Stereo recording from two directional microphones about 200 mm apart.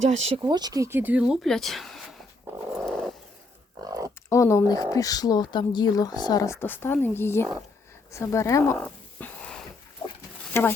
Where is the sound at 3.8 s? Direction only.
15° right (ahead or behind).